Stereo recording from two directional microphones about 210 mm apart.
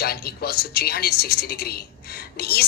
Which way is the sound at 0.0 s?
45° left (ahead or behind).